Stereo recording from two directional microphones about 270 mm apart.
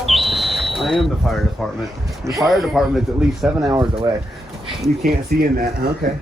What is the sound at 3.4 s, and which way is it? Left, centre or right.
Speech, centre.